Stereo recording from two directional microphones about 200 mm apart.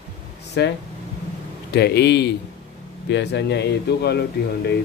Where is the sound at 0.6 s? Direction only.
60° left (ahead or behind).